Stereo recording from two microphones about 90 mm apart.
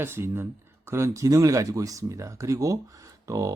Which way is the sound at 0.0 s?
25° right (ahead or behind).